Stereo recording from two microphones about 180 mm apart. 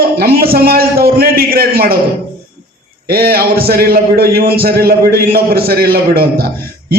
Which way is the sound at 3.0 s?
60° right (ahead or behind).